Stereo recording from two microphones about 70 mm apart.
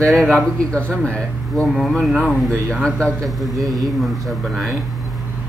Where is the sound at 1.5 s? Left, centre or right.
Centre.